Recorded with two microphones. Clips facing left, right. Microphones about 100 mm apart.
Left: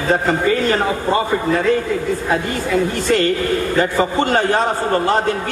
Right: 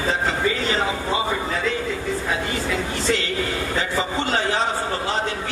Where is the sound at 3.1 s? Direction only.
50° left (ahead or behind).